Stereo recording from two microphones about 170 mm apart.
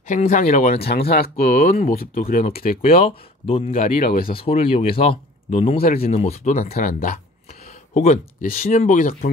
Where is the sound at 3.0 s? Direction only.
35° left (ahead or behind).